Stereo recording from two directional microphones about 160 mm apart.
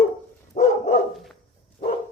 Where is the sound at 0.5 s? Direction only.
55° left (ahead or behind).